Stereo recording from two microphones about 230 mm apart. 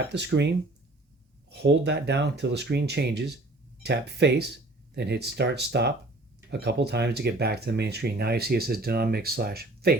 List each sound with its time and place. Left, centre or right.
0.1 s speech: right